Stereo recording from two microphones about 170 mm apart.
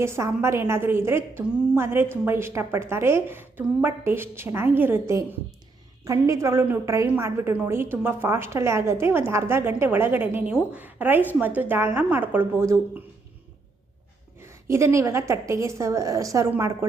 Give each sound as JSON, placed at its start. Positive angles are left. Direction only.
{"t": 0.0, "sound": "a woman's voice", "side_deg": -15}
{"t": 14.4, "sound": "a sound", "side_deg": -15}
{"t": 14.9, "sound": "a woman's voice", "side_deg": -15}